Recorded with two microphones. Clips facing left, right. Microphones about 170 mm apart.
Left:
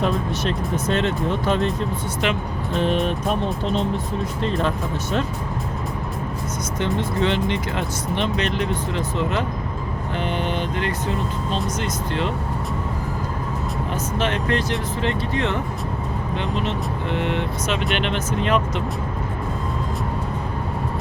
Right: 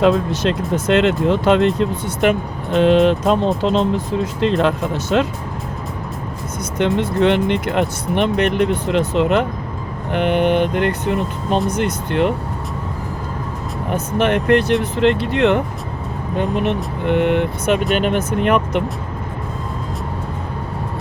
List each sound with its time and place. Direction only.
0.0 s speech: 85° right
2.2 s speech: 50° right (ahead or behind)
2.7 s speech: 90° right
6.7 s speech: 65° right (ahead or behind)
13.9 s speech: 60° right (ahead or behind)
16.3 s speech: 50° right (ahead or behind)